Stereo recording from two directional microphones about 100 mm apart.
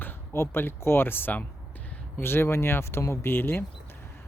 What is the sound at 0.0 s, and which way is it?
Speech, 20° left (ahead or behind).